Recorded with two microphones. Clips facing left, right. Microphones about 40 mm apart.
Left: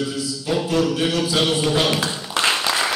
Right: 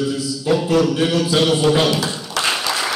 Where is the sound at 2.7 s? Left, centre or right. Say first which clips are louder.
Even; centre.